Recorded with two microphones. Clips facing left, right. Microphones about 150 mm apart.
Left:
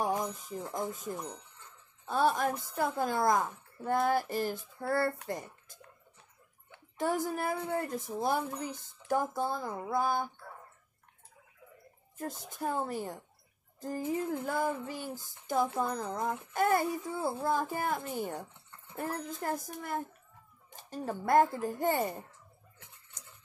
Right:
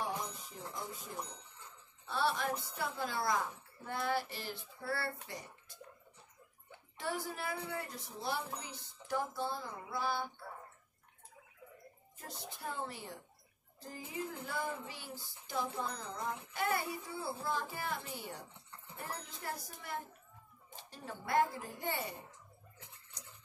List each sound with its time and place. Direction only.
0.0 s a sound: 50° left (ahead or behind)
0.7 s female singing: 45° left (ahead or behind)
7.0 s female singing: 45° left (ahead or behind)
12.2 s female singing: 45° left (ahead or behind)